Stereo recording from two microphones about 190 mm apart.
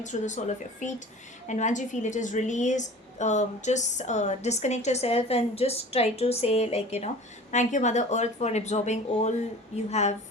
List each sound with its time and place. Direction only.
0.0 s a woman's voice: 40° left (ahead or behind)